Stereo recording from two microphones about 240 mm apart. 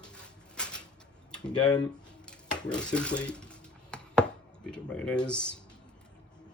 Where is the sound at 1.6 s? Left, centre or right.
Centre.